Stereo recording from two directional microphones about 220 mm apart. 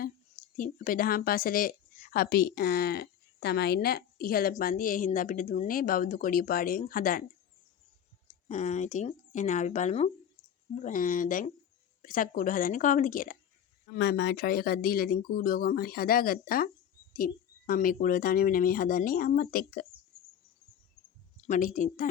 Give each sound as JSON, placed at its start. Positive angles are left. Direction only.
{"t": 0.5, "sound": "speech", "side_deg": 40}
{"t": 8.4, "sound": "speech", "side_deg": 30}
{"t": 21.4, "sound": "speech", "side_deg": 35}